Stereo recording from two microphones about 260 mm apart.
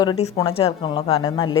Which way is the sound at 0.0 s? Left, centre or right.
Left.